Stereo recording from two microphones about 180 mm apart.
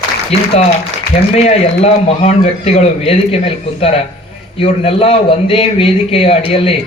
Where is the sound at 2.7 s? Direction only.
35° left (ahead or behind).